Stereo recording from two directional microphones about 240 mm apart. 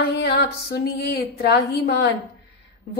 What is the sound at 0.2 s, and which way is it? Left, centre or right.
Speech, left.